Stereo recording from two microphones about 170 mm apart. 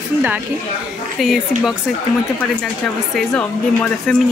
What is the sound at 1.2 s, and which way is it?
Speech, centre (ahead or behind).